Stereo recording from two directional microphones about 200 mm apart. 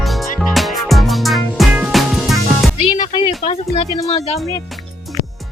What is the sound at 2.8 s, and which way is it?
Music, 30° left (ahead or behind).